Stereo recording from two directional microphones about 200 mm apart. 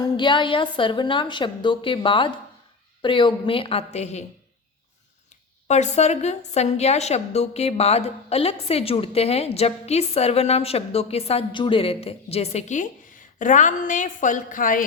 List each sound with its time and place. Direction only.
0.0 s a woman's voice: 25° left (ahead or behind)
5.6 s a woman's voice: 35° left (ahead or behind)